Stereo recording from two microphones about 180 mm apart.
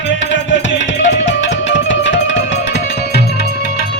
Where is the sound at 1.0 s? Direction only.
90° left.